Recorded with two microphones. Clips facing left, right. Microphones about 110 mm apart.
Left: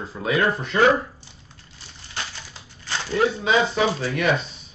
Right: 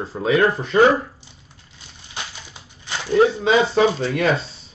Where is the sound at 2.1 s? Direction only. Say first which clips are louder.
Even; 15° right (ahead or behind); by 4.4 s 30° right (ahead or behind).